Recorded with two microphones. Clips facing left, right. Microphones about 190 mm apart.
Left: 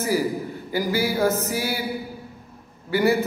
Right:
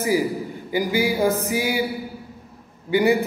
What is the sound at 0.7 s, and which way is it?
A man's voice, 15° right (ahead or behind).